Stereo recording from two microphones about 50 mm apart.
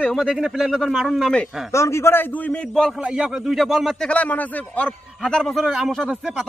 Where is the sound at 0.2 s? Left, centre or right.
Centre.